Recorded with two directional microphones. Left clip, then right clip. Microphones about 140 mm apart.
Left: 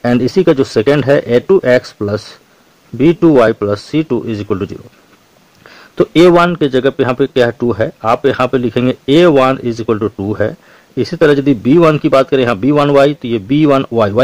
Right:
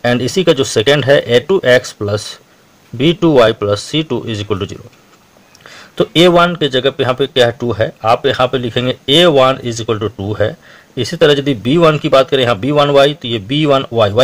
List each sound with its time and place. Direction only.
0.0 s speech: 30° left (ahead or behind)
5.7 s a man's voice: 35° left (ahead or behind)